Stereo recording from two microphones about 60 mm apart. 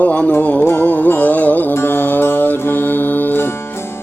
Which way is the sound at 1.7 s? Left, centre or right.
Left.